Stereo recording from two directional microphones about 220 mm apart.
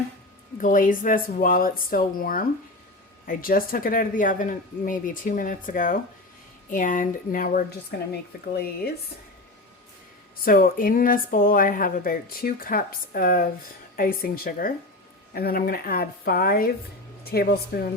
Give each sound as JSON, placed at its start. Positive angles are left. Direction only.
{"t": 0.6, "sound": "speech", "side_deg": 35}
{"t": 10.4, "sound": "speech", "side_deg": 40}